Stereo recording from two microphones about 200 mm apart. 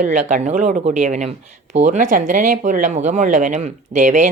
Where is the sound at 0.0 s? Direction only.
35° right (ahead or behind).